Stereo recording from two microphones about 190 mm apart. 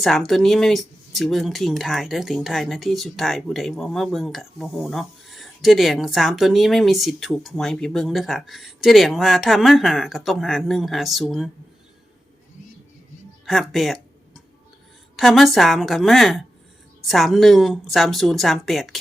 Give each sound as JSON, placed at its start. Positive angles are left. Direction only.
{"t": 0.0, "sound": "speech", "side_deg": 0}
{"t": 13.4, "sound": "music", "side_deg": 0}
{"t": 15.1, "sound": "a woman's voice", "side_deg": 0}